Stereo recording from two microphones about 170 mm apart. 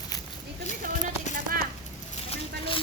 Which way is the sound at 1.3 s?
55° right (ahead or behind).